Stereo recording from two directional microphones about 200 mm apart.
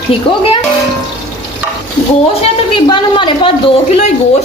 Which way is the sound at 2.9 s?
25° left (ahead or behind).